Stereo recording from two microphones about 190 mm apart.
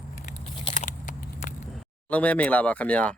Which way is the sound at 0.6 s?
35° left (ahead or behind).